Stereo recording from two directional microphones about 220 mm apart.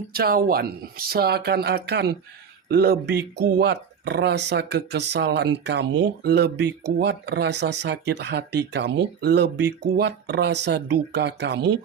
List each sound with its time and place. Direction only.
0.1 s speech: 45° right (ahead or behind)